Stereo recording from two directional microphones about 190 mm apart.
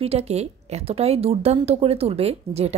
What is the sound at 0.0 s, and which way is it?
A woman's voice, 35° right (ahead or behind).